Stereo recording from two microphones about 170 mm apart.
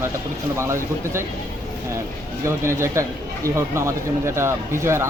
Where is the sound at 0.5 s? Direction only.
15° right (ahead or behind).